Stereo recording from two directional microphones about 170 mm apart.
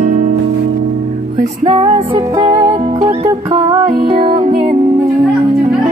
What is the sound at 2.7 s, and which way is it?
Music, 30° right (ahead or behind).